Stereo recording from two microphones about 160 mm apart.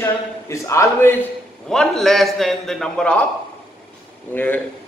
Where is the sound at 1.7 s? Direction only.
Centre (ahead or behind).